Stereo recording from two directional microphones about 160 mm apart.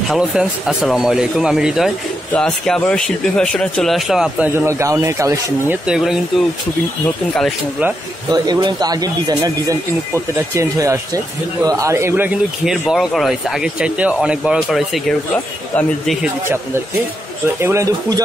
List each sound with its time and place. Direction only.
0.1 s speech: 5° right (ahead or behind)
4.6 s speech: 15° right (ahead or behind)
5.9 s speech: 5° right (ahead or behind)
8.3 s speech: 25° right (ahead or behind); by 15.1 s centre (ahead or behind)
15.3 s speech: 10° left (ahead or behind)
17.6 s speech: 15° right (ahead or behind)